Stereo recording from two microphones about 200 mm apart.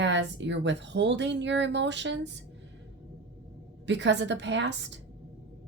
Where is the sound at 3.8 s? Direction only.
60° right (ahead or behind).